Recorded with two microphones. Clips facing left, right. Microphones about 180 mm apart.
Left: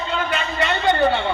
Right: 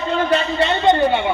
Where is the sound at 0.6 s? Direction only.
20° right (ahead or behind).